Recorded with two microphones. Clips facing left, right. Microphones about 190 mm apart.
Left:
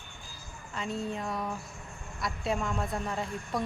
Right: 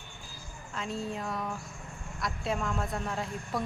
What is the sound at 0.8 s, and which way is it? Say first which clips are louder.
Speech: left 1 dB; centre (ahead or behind).